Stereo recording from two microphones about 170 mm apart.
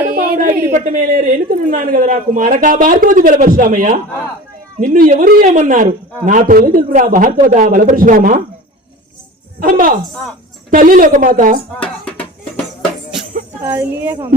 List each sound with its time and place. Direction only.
0.0 s a sound: 65° right (ahead or behind)
0.7 s a woman's voice: 50° right (ahead or behind)
9.6 s a woman's voice: 55° right (ahead or behind)
13.6 s speech: 10° right (ahead or behind)